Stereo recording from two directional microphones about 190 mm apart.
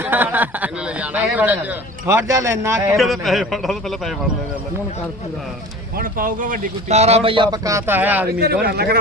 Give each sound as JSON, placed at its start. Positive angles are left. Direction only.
{"t": 0.0, "sound": "a man's voice", "side_deg": -10}
{"t": 2.9, "sound": "a man's voice", "side_deg": 0}
{"t": 6.0, "sound": "a man's voice", "side_deg": -45}
{"t": 8.6, "sound": "speech", "side_deg": -55}